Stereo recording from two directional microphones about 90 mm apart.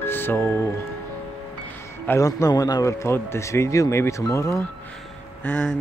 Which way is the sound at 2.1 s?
35° left (ahead or behind).